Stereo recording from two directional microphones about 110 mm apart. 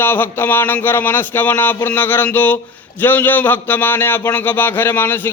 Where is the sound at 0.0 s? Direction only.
20° left (ahead or behind).